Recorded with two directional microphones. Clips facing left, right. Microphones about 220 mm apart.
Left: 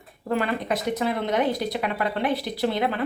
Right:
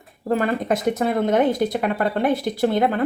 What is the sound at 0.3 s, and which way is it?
Speech, 45° right (ahead or behind).